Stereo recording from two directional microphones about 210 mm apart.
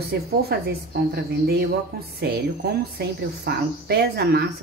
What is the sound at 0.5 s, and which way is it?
A woman's voice, 50° right (ahead or behind).